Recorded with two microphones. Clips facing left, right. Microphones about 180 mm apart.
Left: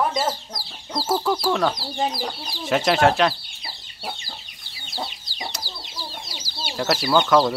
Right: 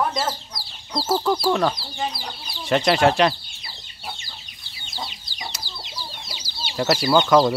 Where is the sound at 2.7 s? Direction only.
Centre (ahead or behind).